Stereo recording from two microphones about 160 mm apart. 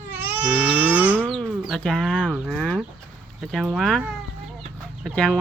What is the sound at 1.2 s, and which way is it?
Livestock, 5° left (ahead or behind).